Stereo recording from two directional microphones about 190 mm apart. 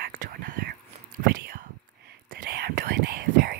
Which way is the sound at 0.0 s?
50° right (ahead or behind).